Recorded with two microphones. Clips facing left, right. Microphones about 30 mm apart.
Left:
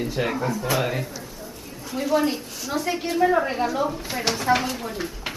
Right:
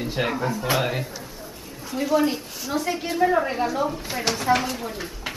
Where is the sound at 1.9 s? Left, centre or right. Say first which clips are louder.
Right 1 dB; centre.